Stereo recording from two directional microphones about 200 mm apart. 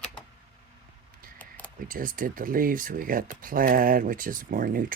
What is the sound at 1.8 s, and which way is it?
Speech, 45° right (ahead or behind).